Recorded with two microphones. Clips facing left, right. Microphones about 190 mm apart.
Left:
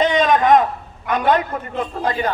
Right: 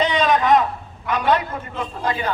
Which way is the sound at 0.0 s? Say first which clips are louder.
Left 3 dB; 50° left (ahead or behind).